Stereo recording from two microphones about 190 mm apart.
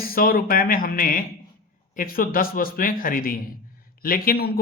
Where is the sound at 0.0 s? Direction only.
50° left (ahead or behind).